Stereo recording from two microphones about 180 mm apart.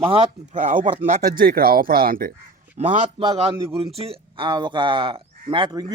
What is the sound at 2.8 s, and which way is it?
Speech, 40° right (ahead or behind).